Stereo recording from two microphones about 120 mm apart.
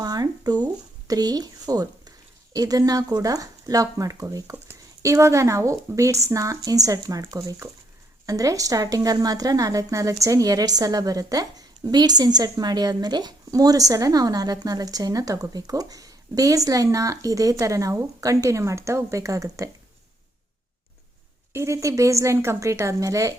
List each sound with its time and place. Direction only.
0.0 s speech: 35° right (ahead or behind)
21.5 s speech: 25° right (ahead or behind)